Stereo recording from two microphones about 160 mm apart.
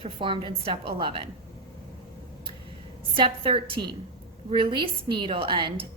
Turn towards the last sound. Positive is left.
turn(degrees=-35)  # may be behind; listen again after turning